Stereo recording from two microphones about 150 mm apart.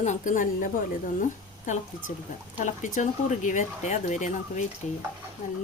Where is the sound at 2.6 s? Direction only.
55° left (ahead or behind).